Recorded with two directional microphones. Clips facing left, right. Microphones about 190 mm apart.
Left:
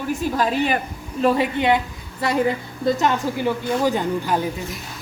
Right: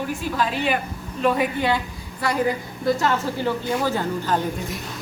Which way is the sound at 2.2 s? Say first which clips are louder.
Left 2 dB; 25° left (ahead or behind).